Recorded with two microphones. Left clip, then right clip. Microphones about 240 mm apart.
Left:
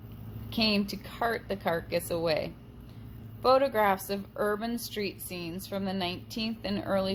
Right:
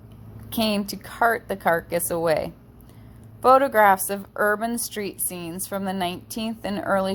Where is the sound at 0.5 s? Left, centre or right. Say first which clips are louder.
Right 4 dB; right.